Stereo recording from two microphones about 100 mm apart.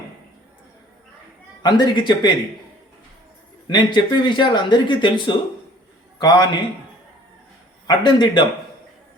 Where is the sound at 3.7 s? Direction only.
50° left (ahead or behind).